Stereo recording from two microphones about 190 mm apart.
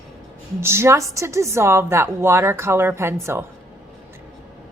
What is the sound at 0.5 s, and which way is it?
A woman's voice, 15° right (ahead or behind).